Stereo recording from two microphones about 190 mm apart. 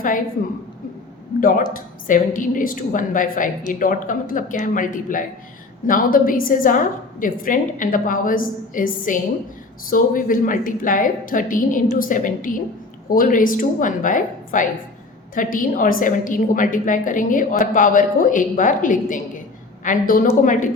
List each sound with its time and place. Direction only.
1.4 s a woman's voice: 50° left (ahead or behind)